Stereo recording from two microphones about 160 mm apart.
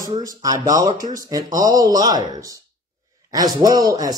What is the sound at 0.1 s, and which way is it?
Speech, 20° right (ahead or behind).